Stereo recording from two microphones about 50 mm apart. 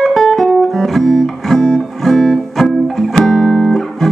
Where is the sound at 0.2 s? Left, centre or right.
Centre.